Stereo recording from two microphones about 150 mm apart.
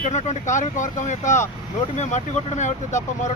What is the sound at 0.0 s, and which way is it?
Speech, 50° left (ahead or behind).